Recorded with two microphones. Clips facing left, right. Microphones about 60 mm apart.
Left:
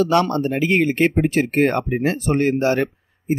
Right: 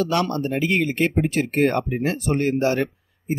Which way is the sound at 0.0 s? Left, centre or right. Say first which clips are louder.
Left 5 dB; left.